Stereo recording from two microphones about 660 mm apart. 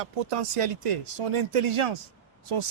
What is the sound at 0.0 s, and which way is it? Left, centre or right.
Speech, right.